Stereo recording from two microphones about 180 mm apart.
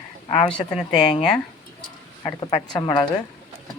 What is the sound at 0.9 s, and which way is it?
Speech, 25° left (ahead or behind).